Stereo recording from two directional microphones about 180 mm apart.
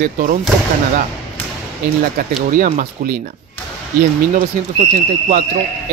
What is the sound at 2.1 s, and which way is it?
Speech, 50° right (ahead or behind).